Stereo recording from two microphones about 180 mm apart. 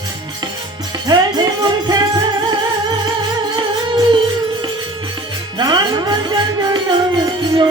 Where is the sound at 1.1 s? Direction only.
25° right (ahead or behind).